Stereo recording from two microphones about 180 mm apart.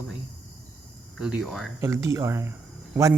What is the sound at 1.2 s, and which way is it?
Speech, 5° right (ahead or behind).